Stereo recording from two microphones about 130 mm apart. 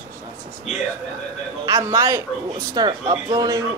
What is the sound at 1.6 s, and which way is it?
A man's voice, 25° right (ahead or behind).